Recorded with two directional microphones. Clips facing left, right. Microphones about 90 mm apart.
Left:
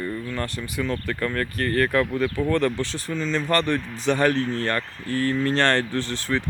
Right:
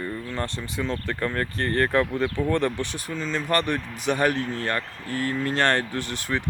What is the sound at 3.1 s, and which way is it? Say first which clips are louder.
Speech: left 2 dB; 5° right (ahead or behind).